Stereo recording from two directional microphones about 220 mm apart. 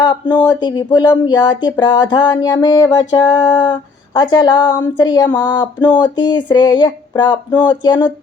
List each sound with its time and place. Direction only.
0.3 s speech: 20° left (ahead or behind)